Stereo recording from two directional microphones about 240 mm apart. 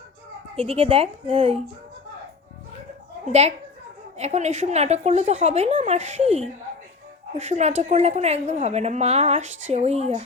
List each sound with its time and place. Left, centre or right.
0.5 s a woman's voice: right
4.2 s a woman's voice: right